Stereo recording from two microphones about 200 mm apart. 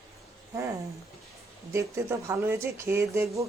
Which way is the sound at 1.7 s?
15° right (ahead or behind).